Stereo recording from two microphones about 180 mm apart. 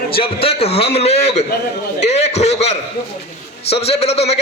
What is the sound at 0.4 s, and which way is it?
A man's voice, 35° left (ahead or behind).